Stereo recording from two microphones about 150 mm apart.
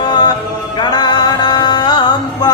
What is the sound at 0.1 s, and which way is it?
Music, 25° left (ahead or behind).